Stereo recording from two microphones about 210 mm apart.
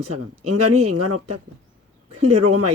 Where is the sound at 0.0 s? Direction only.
90° right.